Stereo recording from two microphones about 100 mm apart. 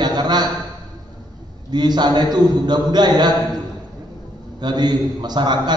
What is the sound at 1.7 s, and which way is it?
A man's voice, 45° right (ahead or behind).